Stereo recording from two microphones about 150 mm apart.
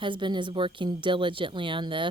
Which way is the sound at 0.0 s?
30° right (ahead or behind).